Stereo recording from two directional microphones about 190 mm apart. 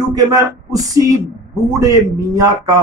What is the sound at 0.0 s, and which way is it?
Speech, 20° right (ahead or behind).